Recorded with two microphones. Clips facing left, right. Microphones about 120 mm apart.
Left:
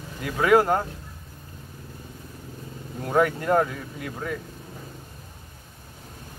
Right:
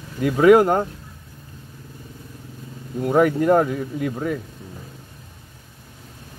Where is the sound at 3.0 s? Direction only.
20° right (ahead or behind).